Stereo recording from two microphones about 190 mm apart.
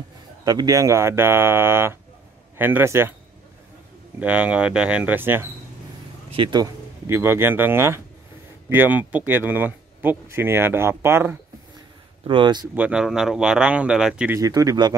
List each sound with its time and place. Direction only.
0.5 s speech: 20° right (ahead or behind)
4.2 s speech: 5° right (ahead or behind)
6.3 s speech: 25° right (ahead or behind)
12.3 s speech: 25° right (ahead or behind)
12.7 s speech: 5° right (ahead or behind)
14.4 s speech: 20° right (ahead or behind)